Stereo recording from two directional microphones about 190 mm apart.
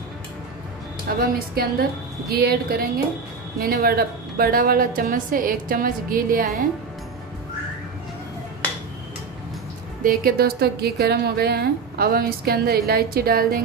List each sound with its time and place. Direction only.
1.0 s a woman's voice: 50° right (ahead or behind)
10.0 s a woman's voice: 50° right (ahead or behind)